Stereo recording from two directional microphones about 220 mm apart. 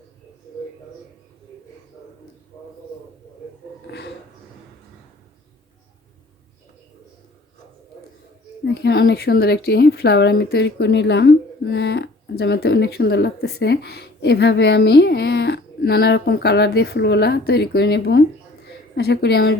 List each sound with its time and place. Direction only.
8.6 s speech: 45° left (ahead or behind)